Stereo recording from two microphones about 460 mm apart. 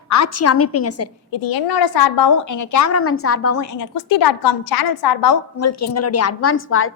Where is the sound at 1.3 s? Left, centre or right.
Left.